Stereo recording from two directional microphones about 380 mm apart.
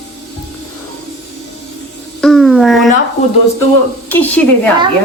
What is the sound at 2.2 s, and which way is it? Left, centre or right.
Music, centre.